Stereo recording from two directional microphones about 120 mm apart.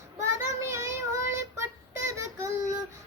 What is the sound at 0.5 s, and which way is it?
Child singing, 25° right (ahead or behind).